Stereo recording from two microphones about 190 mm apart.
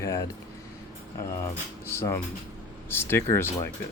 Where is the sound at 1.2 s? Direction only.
15° left (ahead or behind).